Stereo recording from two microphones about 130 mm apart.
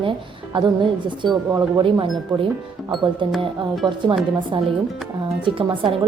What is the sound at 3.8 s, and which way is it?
Speech, 35° right (ahead or behind).